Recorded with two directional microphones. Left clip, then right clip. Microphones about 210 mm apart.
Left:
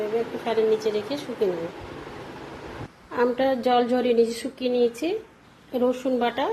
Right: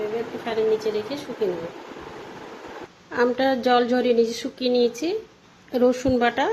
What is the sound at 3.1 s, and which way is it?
Speech, 10° right (ahead or behind).